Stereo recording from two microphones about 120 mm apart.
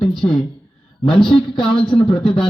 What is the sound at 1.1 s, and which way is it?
Speech, 50° left (ahead or behind).